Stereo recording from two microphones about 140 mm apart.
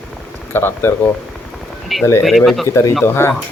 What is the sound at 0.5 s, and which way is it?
Speech, 15° left (ahead or behind).